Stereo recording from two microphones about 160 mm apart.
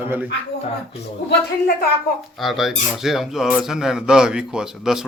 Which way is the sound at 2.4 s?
Centre (ahead or behind).